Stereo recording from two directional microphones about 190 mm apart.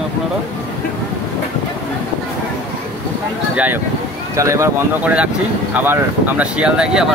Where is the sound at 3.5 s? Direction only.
10° right (ahead or behind).